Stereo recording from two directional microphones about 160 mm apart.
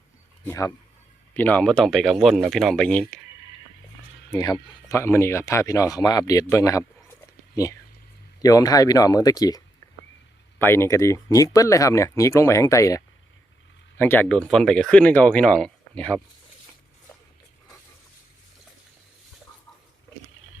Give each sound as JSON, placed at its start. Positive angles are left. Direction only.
{"t": 0.4, "sound": "speech", "side_deg": 20}
{"t": 4.3, "sound": "speech", "side_deg": 20}
{"t": 9.8, "sound": "a sound", "side_deg": 20}
{"t": 10.6, "sound": "speech", "side_deg": 15}
{"t": 14.0, "sound": "speech", "side_deg": 10}